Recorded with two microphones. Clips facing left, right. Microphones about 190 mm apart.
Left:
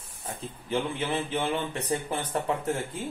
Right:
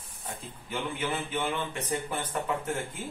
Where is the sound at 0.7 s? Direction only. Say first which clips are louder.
Left 4 dB; 30° left (ahead or behind).